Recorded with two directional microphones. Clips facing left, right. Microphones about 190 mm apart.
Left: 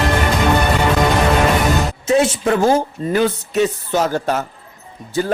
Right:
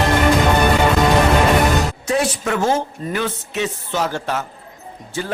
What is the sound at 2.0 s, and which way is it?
Speech, 25° left (ahead or behind).